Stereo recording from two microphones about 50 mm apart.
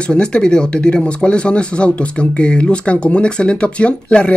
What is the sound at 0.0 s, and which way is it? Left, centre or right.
Speech, centre.